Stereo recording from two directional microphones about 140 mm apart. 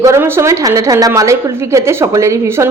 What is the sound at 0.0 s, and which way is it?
A woman's voice, 20° right (ahead or behind).